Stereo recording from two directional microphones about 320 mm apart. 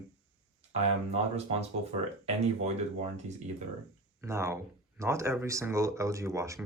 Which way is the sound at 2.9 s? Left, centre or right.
Right.